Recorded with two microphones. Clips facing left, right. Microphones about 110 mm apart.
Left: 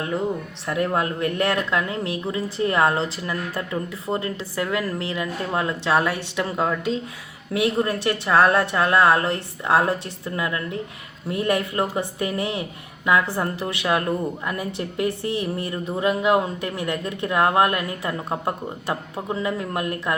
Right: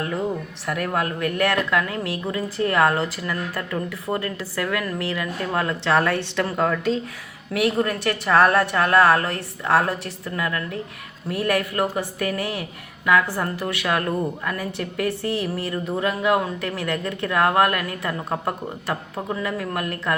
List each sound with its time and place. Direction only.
0.7 s speech: 25° left (ahead or behind)